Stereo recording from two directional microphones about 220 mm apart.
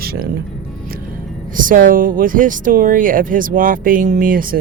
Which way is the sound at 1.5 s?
40° right (ahead or behind).